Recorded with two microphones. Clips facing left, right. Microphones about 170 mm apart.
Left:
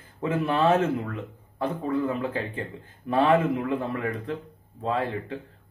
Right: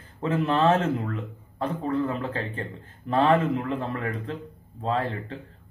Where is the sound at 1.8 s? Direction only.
15° left (ahead or behind).